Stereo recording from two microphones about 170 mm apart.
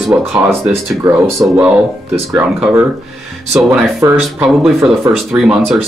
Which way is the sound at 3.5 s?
Centre (ahead or behind).